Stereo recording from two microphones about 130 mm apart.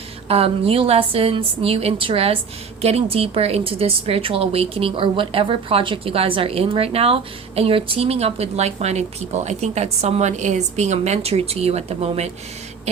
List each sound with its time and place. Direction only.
0.3 s a woman's voice: 50° right (ahead or behind)